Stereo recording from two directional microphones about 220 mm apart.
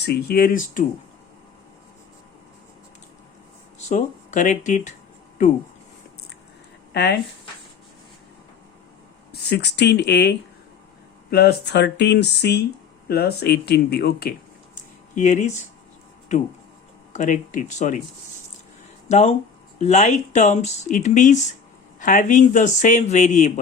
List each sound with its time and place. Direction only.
0.0 s speech: 45° left (ahead or behind)
3.8 s speech: 30° left (ahead or behind)
6.9 s speech: 50° left (ahead or behind)
9.3 s speech: 50° left (ahead or behind)
14.8 s a sound: 35° left (ahead or behind)
16.3 s speech: 30° left (ahead or behind)
19.0 s speech: 30° left (ahead or behind)